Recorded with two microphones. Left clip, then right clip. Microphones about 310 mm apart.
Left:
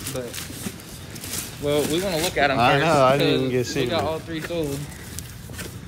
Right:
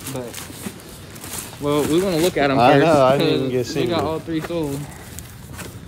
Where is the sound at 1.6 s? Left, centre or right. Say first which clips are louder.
Right 4 dB; right.